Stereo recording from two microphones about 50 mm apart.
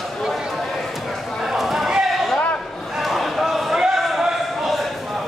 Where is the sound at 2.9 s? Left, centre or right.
Centre.